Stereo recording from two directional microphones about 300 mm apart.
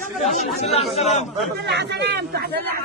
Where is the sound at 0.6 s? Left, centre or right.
Left.